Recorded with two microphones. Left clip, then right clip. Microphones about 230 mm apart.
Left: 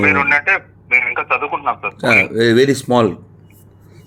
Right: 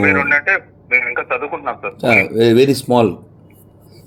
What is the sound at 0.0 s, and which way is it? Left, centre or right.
Speech, centre.